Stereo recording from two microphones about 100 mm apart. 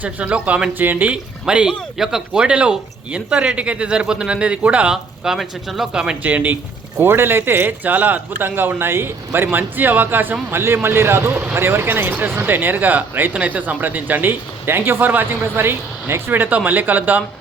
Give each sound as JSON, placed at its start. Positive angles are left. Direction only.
{"t": 0.0, "sound": "speech", "side_deg": -15}